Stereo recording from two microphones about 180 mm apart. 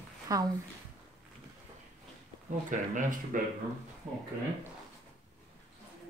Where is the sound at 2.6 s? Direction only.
45° right (ahead or behind).